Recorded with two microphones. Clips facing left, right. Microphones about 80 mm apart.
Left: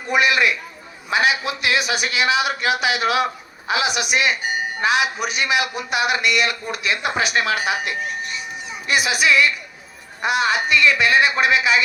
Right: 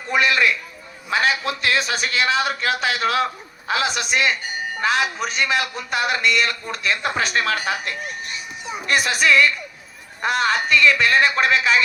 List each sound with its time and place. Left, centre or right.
0.1 s a man's voice: centre